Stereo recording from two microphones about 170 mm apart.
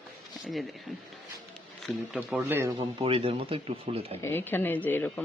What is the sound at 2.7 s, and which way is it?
Speech, 35° right (ahead or behind).